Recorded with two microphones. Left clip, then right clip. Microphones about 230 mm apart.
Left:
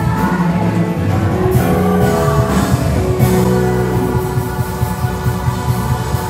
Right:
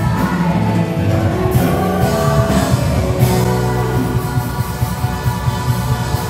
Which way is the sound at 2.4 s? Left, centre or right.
Centre.